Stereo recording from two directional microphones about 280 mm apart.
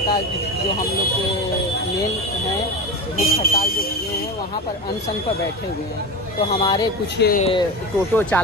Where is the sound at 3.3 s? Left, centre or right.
Left.